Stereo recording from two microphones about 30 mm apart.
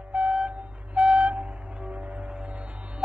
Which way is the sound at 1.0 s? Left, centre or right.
Right.